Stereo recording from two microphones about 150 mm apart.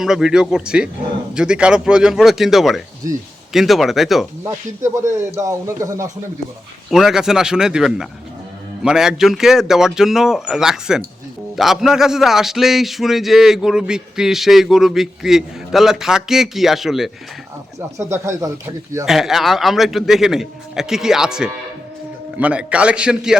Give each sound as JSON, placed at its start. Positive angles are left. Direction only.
{"t": 0.0, "sound": "speech", "side_deg": -5}
{"t": 5.4, "sound": "speech", "side_deg": -20}
{"t": 6.9, "sound": "speech", "side_deg": -5}
{"t": 17.7, "sound": "speech", "side_deg": -20}
{"t": 19.0, "sound": "a man's voice", "side_deg": 0}